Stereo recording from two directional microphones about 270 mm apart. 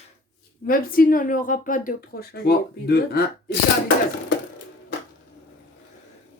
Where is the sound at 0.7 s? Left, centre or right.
Left.